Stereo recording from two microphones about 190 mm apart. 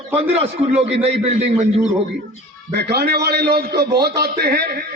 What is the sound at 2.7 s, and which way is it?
A man's voice, 60° right (ahead or behind).